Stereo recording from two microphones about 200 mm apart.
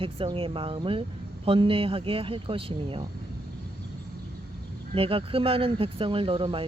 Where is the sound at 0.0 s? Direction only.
25° right (ahead or behind).